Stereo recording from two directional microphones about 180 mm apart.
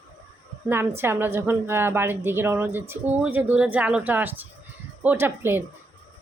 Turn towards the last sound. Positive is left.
turn(degrees=-10)  # may be behind; listen again after turning